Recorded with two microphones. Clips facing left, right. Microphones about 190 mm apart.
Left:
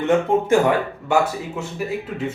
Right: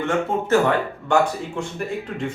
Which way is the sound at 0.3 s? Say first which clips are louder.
Left 5 dB; 15° left (ahead or behind).